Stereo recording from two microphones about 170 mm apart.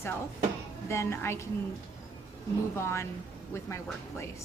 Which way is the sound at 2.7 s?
15° left (ahead or behind).